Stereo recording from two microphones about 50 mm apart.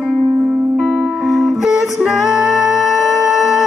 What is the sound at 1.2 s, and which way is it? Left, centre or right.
Music, centre.